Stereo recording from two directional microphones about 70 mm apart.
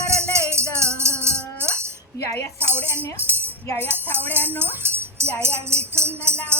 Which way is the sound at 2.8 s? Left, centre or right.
Left.